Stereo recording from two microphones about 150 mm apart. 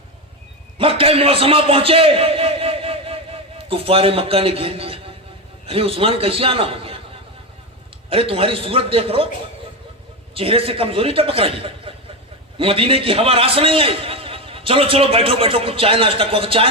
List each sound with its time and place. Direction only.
0.8 s a man's voice: 40° right (ahead or behind)
8.1 s a man's voice: 40° right (ahead or behind)
10.3 s a man's voice: 40° right (ahead or behind)